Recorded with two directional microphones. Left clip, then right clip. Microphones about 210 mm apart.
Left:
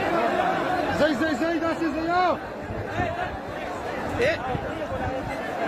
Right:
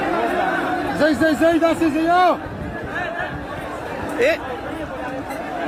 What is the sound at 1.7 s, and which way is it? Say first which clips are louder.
Speech: right 8 dB; 25° right (ahead or behind).